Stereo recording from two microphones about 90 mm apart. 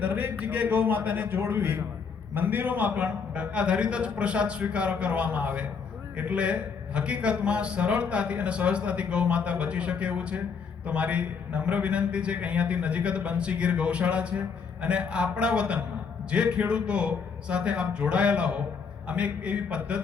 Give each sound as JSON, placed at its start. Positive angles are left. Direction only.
{"t": 0.0, "sound": "a man's voice", "side_deg": -15}